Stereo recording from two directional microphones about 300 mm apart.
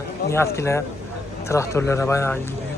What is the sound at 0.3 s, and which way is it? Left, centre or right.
Speech, centre.